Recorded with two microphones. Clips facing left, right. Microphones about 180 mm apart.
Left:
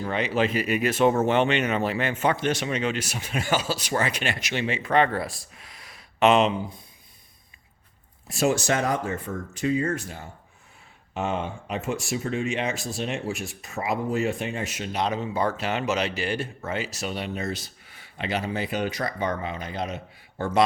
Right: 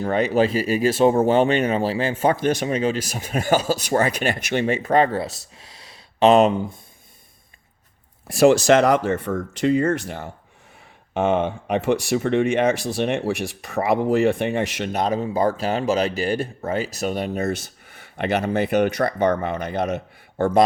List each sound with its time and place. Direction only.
0.0 s speech: 45° right (ahead or behind)
8.4 s speech: 85° right
11.1 s speech: 60° right (ahead or behind)
15.0 s speech: 40° right (ahead or behind); by 20.0 s 65° right (ahead or behind)
20.4 s speech: 45° right (ahead or behind)